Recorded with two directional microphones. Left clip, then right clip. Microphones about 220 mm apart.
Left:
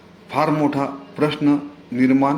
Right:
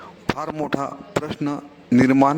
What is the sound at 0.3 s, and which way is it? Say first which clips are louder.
A man's voice: left 10 dB; 50° right (ahead or behind).